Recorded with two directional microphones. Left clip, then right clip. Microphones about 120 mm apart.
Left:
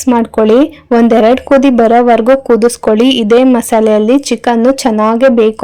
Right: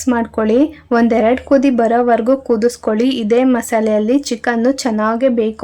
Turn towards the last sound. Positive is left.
turn(degrees=45)  # may be behind; listen again after turning